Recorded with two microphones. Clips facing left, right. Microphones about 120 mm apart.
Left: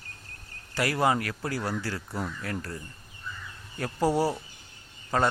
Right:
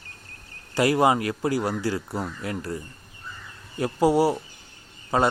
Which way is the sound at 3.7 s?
15° right (ahead or behind).